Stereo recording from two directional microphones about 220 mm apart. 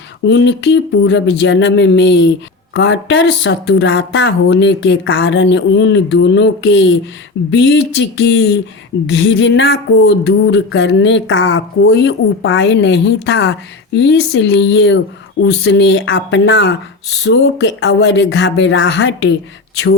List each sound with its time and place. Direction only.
0.3 s speech: 50° left (ahead or behind)